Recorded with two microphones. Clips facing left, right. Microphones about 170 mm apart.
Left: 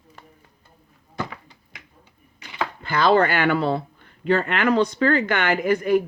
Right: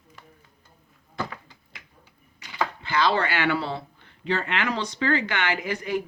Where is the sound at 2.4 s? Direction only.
50° left (ahead or behind).